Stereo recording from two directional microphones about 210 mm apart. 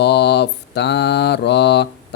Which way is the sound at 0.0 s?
55° left (ahead or behind).